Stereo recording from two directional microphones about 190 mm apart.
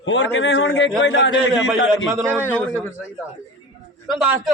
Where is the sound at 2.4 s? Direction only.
10° left (ahead or behind).